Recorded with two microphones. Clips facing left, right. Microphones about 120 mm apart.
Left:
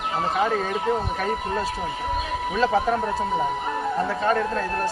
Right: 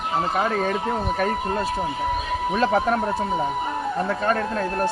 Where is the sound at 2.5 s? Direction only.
60° right (ahead or behind).